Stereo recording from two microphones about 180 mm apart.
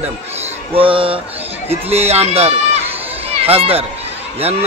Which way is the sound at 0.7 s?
30° right (ahead or behind).